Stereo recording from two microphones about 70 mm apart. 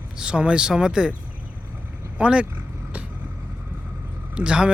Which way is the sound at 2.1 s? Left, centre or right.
Centre.